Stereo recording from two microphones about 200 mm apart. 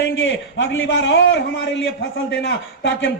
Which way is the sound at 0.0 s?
70° left (ahead or behind).